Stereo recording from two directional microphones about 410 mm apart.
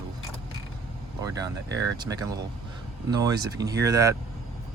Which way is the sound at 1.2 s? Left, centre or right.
Centre.